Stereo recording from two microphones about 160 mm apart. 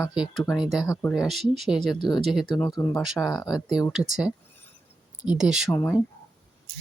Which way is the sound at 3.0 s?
5° right (ahead or behind).